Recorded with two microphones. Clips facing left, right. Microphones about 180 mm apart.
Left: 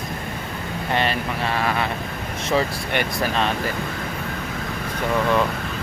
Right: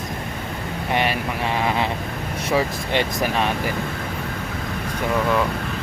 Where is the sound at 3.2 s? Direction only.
15° right (ahead or behind).